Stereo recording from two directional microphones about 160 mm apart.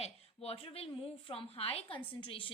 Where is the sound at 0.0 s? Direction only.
35° left (ahead or behind).